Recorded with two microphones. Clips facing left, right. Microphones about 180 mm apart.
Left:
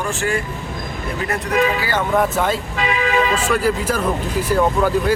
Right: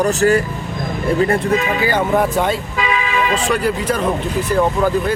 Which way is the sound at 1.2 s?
25° right (ahead or behind).